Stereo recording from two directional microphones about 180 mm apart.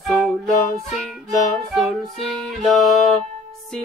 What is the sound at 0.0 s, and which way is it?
Music, centre (ahead or behind).